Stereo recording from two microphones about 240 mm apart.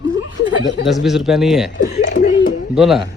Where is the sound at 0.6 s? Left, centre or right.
Left.